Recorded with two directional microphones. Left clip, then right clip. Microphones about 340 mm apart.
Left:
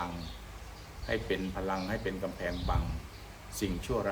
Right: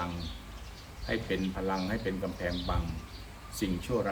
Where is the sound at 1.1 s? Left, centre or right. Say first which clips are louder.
Even; centre.